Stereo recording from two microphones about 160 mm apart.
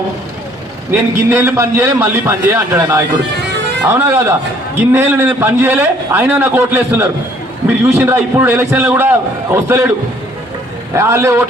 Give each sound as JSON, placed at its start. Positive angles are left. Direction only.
{"t": 0.9, "sound": "a man's voice", "side_deg": -15}
{"t": 10.9, "sound": "a man's voice", "side_deg": -15}